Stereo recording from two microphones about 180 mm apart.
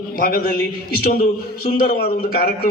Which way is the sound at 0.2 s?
55° left (ahead or behind).